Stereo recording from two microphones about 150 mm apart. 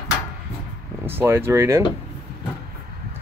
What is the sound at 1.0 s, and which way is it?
Speech, 15° right (ahead or behind).